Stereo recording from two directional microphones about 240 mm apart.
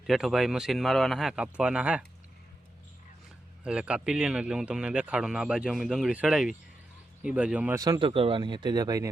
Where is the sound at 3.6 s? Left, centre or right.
Centre.